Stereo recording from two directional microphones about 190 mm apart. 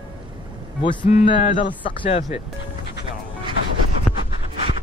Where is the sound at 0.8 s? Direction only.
25° left (ahead or behind).